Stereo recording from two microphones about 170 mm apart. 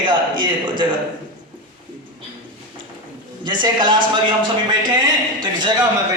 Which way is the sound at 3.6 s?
25° right (ahead or behind).